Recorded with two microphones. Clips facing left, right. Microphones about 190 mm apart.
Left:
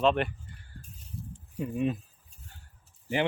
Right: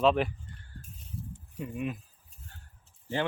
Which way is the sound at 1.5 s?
25° left (ahead or behind).